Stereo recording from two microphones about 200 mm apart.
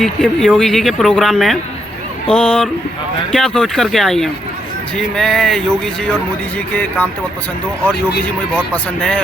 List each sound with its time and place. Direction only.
0.0 s speech: centre (ahead or behind)
8.7 s speech: 5° left (ahead or behind)